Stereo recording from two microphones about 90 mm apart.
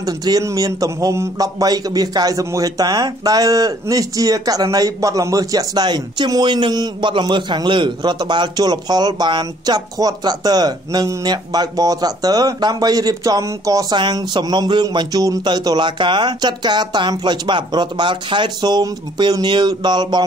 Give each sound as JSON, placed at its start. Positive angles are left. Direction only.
{"t": 0.0, "sound": "a man's voice", "side_deg": -45}
{"t": 1.4, "sound": "a man's voice", "side_deg": -45}
{"t": 13.9, "sound": "speech", "side_deg": -55}